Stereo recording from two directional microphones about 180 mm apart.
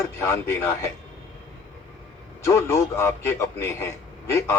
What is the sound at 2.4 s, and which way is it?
Speech, 15° left (ahead or behind).